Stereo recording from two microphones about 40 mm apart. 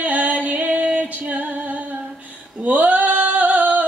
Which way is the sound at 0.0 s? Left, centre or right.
Right.